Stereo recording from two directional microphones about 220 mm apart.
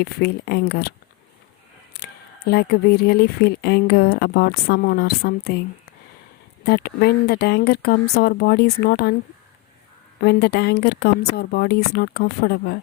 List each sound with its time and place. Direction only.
0.0 s speech: 45° left (ahead or behind)
6.7 s speech: 45° left (ahead or behind)
10.2 s speech: 45° left (ahead or behind)